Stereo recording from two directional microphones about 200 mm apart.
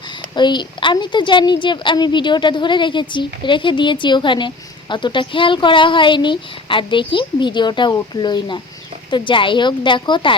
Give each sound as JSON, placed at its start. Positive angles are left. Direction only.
{"t": 0.3, "sound": "a woman's voice", "side_deg": 20}